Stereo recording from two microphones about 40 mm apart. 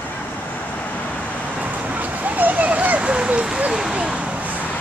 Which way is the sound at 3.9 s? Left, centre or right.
Right.